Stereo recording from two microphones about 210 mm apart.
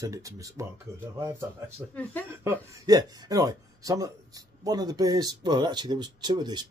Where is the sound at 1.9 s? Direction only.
10° left (ahead or behind).